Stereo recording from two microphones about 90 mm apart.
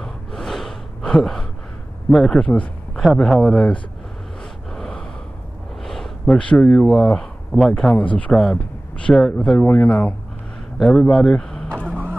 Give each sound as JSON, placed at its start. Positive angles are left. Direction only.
{"t": 0.0, "sound": "gasp", "side_deg": 5}
{"t": 2.0, "sound": "speech", "side_deg": 5}
{"t": 3.0, "sound": "speech", "side_deg": 0}
{"t": 4.7, "sound": "gasp", "side_deg": 10}
{"t": 5.9, "sound": "a sound", "side_deg": 5}
{"t": 6.3, "sound": "speech", "side_deg": 10}
{"t": 7.9, "sound": "speech", "side_deg": 15}
{"t": 8.3, "sound": "speech", "side_deg": 0}
{"t": 8.5, "sound": "speech", "side_deg": 15}
{"t": 10.8, "sound": "speech", "side_deg": 5}